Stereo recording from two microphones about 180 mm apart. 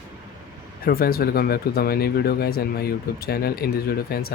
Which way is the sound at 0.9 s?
55° left (ahead or behind).